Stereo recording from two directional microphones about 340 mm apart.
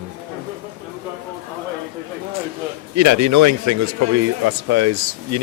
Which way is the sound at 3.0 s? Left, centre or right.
Right.